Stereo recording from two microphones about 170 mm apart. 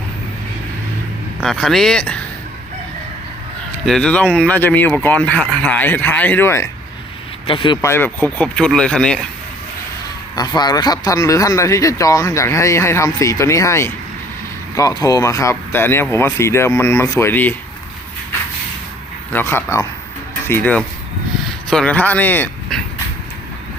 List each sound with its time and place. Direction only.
1.4 s speech: centre (ahead or behind)
3.8 s speech: 5° left (ahead or behind)
7.4 s speech: 30° left (ahead or behind)
7.8 s speech: 15° left (ahead or behind)
10.3 s speech: 25° left (ahead or behind)
19.3 s speech: 10° left (ahead or behind)